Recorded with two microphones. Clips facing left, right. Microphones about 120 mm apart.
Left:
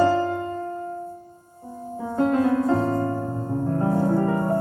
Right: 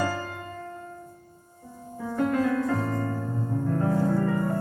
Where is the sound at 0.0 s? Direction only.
25° left (ahead or behind).